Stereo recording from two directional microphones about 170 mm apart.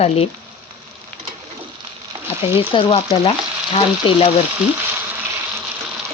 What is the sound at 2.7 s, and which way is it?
Speech, 30° left (ahead or behind).